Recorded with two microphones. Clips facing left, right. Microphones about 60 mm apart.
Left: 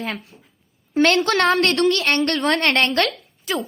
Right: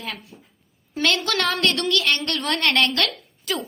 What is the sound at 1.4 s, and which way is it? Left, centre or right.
A woman's voice, left.